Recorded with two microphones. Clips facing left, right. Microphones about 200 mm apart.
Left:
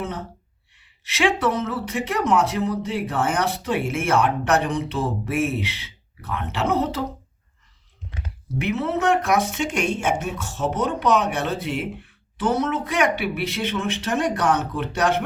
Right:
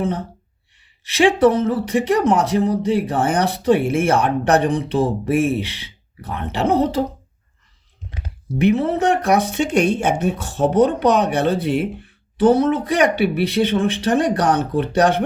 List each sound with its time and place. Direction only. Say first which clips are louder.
1.1 s speech: right 7 dB; 30° right (ahead or behind)
8.6 s speech: right 6 dB; 30° right (ahead or behind)